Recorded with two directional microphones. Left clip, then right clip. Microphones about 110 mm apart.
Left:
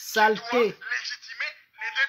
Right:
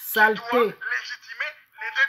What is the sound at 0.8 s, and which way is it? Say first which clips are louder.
Telephone: right 2 dB; 45° right (ahead or behind).